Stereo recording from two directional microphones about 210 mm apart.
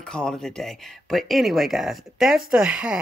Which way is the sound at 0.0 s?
5° left (ahead or behind).